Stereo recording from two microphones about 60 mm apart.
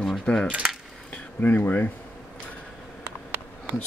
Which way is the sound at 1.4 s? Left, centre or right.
Left.